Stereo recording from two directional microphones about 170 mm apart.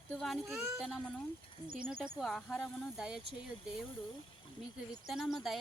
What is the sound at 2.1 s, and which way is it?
Speech, centre (ahead or behind).